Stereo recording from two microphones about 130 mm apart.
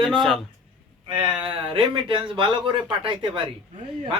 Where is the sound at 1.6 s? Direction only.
45° right (ahead or behind).